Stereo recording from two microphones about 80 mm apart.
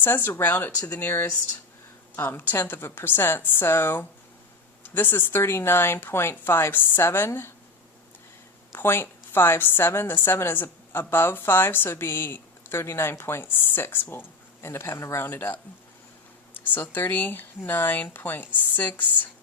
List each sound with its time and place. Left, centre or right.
0.0 s a woman's voice: left
8.7 s a woman's voice: left
16.6 s a woman's voice: left